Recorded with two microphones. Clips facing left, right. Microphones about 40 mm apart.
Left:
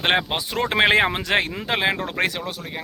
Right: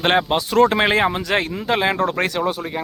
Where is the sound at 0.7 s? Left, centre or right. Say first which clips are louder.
Even; left.